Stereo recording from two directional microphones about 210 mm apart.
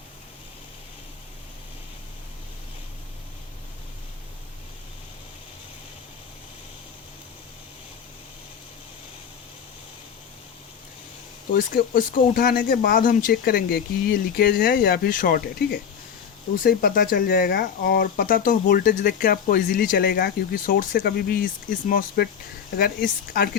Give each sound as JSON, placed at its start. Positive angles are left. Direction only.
{"t": 11.5, "sound": "speech", "side_deg": 45}